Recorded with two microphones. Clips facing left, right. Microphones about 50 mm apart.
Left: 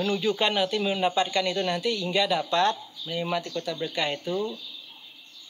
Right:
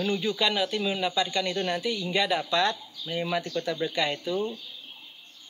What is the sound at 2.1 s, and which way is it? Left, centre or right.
Speech, right.